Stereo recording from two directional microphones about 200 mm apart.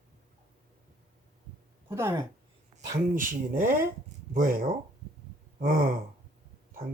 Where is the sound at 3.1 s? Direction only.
40° right (ahead or behind).